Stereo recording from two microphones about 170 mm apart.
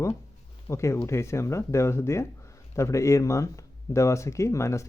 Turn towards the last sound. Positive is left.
turn(degrees=15)  # may be behind; listen again after turning